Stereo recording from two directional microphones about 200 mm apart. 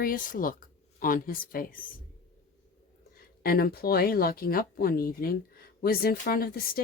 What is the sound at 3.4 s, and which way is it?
Speech, 50° left (ahead or behind).